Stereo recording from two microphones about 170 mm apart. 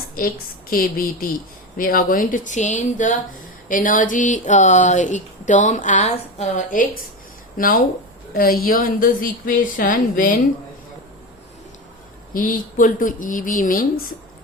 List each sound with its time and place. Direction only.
0.2 s a woman's voice: 55° left (ahead or behind)
12.3 s speech: 55° left (ahead or behind)